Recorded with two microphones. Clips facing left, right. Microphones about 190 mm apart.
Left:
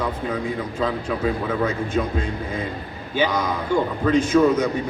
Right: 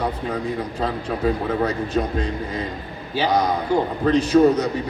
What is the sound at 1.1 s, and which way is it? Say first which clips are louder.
A man's voice: right 1 dB; 40° right (ahead or behind).